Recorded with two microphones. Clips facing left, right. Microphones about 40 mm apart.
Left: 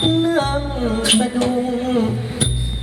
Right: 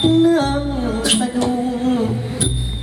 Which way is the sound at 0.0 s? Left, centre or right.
Centre.